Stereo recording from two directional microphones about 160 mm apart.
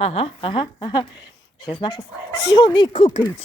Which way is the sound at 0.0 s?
40° left (ahead or behind).